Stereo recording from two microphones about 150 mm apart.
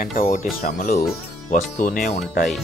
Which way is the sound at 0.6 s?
80° left.